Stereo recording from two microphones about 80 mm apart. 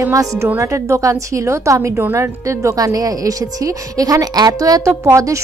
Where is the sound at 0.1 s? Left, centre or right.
Right.